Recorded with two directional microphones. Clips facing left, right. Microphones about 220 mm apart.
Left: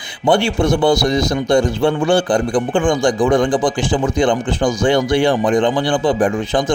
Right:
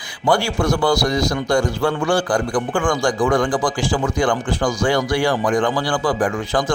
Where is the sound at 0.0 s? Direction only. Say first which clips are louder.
Left 4 dB; 20° left (ahead or behind).